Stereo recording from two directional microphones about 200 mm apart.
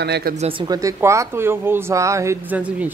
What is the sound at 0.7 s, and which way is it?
Speech, 15° right (ahead or behind).